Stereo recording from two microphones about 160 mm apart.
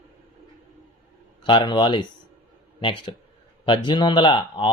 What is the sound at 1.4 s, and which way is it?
A man's voice, 30° left (ahead or behind).